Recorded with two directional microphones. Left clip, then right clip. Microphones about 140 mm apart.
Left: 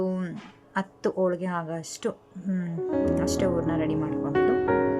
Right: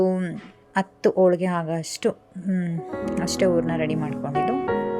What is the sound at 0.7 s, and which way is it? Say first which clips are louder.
A woman's voice: right 7 dB; 25° right (ahead or behind).